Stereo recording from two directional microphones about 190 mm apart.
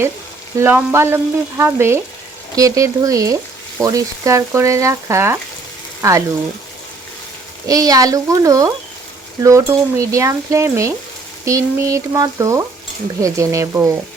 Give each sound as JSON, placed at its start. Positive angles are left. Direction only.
{"t": 0.6, "sound": "frying", "side_deg": -10}
{"t": 6.0, "sound": "speech", "side_deg": -15}
{"t": 7.7, "sound": "frying", "side_deg": -20}